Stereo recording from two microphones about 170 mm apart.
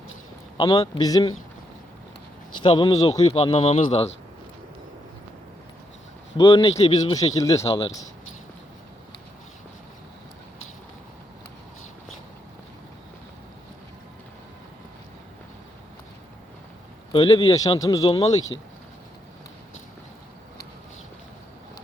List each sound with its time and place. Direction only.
0.5 s a man's voice: 20° left (ahead or behind)
2.6 s a man's voice: 25° left (ahead or behind)
3.2 s speech: 35° left (ahead or behind)
6.3 s speech: 30° left (ahead or behind)
7.2 s a man's voice: 20° left (ahead or behind)
7.6 s speech: 35° left (ahead or behind)
17.1 s a man's voice: 30° left (ahead or behind)